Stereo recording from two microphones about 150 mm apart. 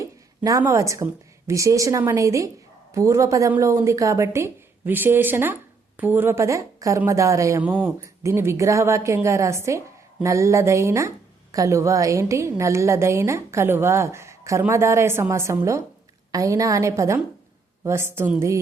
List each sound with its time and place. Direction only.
0.0 s a sound: 25° right (ahead or behind)
0.6 s a woman's voice: 20° right (ahead or behind)
7.6 s a woman's voice: 10° right (ahead or behind)